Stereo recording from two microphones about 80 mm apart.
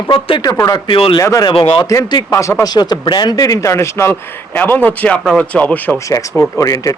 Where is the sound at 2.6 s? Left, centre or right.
Left.